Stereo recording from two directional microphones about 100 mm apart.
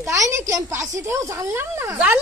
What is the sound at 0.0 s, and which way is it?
Child singing, 30° right (ahead or behind).